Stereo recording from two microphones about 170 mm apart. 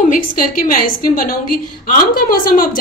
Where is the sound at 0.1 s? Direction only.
55° left (ahead or behind).